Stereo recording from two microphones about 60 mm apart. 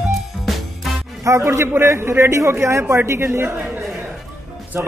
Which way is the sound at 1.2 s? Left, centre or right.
Right.